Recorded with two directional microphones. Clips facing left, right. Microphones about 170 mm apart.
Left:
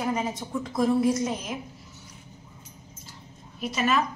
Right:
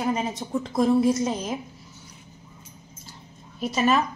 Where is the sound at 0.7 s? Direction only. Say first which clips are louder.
Right 3 dB; 30° right (ahead or behind).